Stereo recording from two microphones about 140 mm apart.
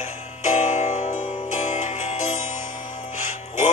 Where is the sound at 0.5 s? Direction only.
60° left (ahead or behind).